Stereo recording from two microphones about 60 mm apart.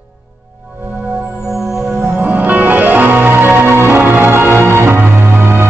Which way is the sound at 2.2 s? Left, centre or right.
Right.